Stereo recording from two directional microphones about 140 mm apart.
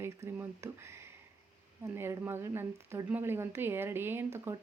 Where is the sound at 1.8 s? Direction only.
20° right (ahead or behind).